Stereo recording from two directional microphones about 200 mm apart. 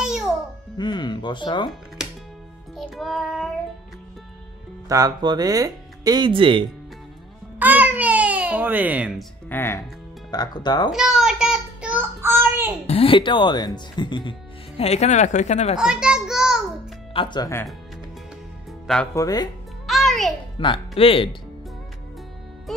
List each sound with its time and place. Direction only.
0.0 s babbling: 5° right (ahead or behind)
0.7 s speech: 20° left (ahead or behind)
2.7 s music: centre (ahead or behind)
4.8 s speech: 15° right (ahead or behind)
7.5 s babbling: 10° right (ahead or behind)
9.5 s speech: 10° left (ahead or behind)
10.9 s child singing: centre (ahead or behind)
12.8 s speech: 30° left (ahead or behind)
15.8 s a sound: 5° right (ahead or behind)
17.1 s speech: 25° left (ahead or behind)
19.1 s speech: 20° left (ahead or behind)
19.9 s music: centre (ahead or behind)
20.5 s speech: 25° left (ahead or behind)
22.7 s music: centre (ahead or behind)